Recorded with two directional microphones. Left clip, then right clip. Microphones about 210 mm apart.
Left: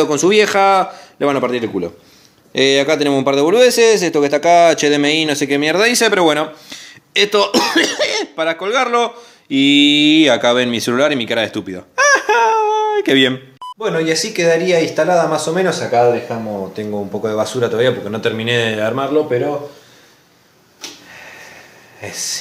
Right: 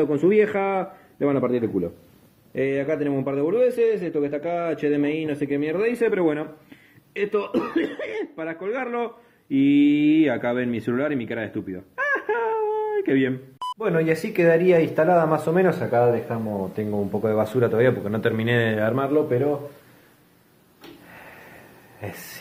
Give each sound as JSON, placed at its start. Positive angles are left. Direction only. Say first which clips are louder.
{"t": 0.0, "sound": "speech", "louder": "left 7 dB", "side_deg": 20}
{"t": 2.5, "sound": "speech", "louder": "left 11 dB", "side_deg": 30}
{"t": 7.5, "sound": "speech", "louder": "left 11 dB", "side_deg": 40}
{"t": 13.6, "sound": "speech", "louder": "left 2 dB", "side_deg": 0}